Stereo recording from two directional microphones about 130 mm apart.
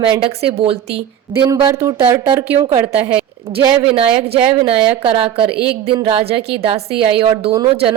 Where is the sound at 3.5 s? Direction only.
20° right (ahead or behind).